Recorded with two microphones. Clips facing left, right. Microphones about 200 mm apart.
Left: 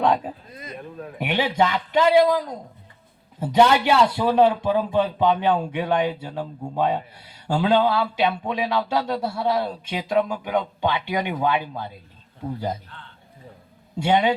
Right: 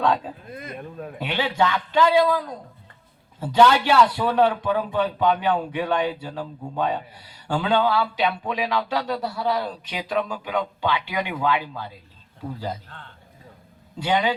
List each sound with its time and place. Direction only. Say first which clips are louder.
1.2 s speech: left 2 dB; 20° left (ahead or behind)
14.0 s speech: left 3 dB; 25° left (ahead or behind)